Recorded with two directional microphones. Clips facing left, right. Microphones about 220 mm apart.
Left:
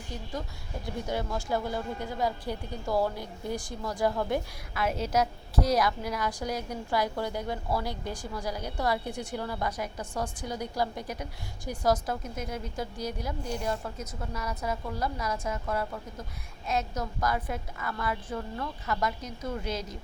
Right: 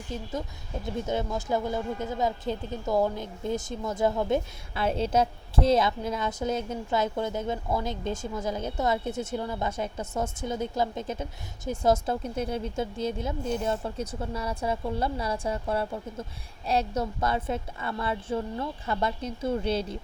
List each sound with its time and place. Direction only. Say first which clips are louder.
0.9 s speech: right 3 dB; 20° right (ahead or behind)